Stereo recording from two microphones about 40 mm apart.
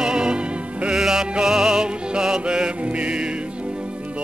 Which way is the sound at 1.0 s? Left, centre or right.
Centre.